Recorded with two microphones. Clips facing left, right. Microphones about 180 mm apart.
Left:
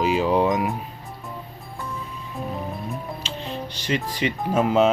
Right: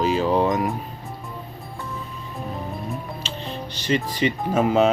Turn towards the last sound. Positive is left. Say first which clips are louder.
# even
turn(degrees=0)  # may be behind; listen again after turning